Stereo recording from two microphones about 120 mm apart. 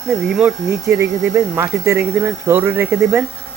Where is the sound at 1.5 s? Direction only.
20° right (ahead or behind).